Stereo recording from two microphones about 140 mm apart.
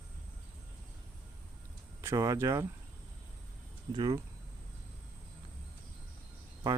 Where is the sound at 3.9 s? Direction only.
30° right (ahead or behind).